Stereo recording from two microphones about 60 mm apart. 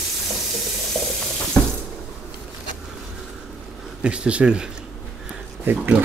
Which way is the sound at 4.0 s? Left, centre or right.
Centre.